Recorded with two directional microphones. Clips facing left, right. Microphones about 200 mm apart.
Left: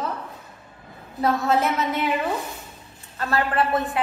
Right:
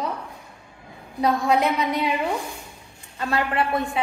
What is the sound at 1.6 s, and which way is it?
Speech, 15° right (ahead or behind).